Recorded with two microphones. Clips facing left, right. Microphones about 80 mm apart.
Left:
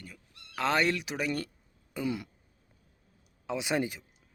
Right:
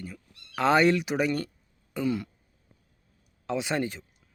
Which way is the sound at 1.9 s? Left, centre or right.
Centre.